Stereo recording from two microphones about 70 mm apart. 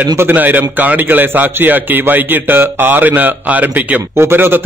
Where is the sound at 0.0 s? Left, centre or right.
Right.